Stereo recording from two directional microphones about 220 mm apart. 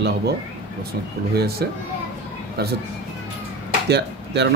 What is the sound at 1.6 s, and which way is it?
Speech, 45° right (ahead or behind).